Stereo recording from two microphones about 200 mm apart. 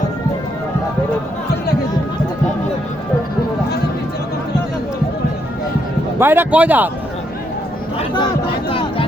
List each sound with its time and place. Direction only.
6.1 s a man's voice: 10° right (ahead or behind)